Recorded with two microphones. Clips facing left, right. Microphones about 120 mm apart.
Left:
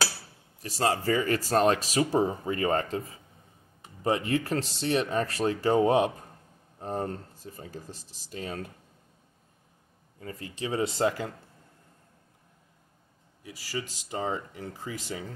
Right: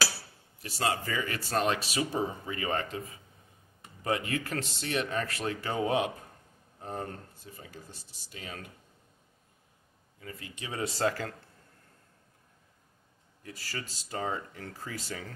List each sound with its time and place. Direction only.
0.6 s speech: 40° left (ahead or behind)
4.0 s speech: 30° left (ahead or behind)
10.2 s speech: 35° left (ahead or behind); by 11.3 s 20° left (ahead or behind)
13.4 s speech: 10° left (ahead or behind)